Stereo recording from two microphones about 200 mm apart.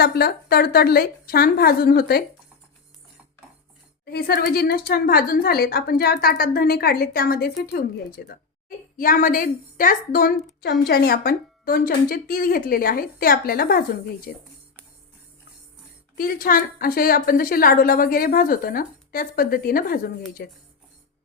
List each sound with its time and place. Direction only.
0.0 s a woman's voice: 50° left (ahead or behind)
4.0 s a woman's voice: 50° left (ahead or behind)
16.1 s a woman's voice: 45° left (ahead or behind)